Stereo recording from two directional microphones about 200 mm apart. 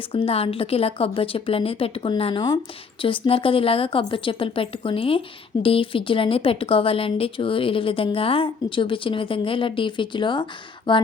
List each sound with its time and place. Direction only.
0.1 s speech: 30° left (ahead or behind)